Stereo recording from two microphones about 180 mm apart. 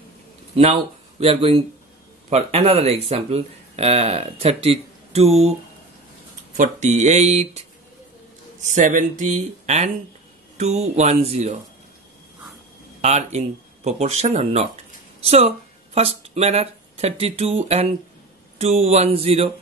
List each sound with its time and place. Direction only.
1.2 s speech: 35° right (ahead or behind)
6.5 s speech: 40° right (ahead or behind)
8.6 s speech: 45° right (ahead or behind)
13.0 s speech: 35° right (ahead or behind)